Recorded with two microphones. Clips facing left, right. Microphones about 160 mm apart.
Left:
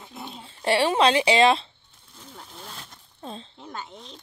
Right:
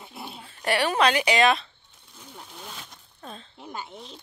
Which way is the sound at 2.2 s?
Centre (ahead or behind).